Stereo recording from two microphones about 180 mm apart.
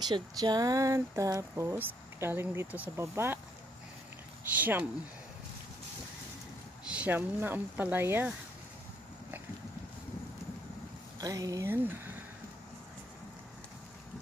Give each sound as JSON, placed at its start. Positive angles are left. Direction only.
{"t": 0.0, "sound": "speech", "side_deg": -20}
{"t": 4.6, "sound": "speech", "side_deg": -10}
{"t": 6.9, "sound": "speech", "side_deg": -10}
{"t": 11.1, "sound": "speech", "side_deg": -20}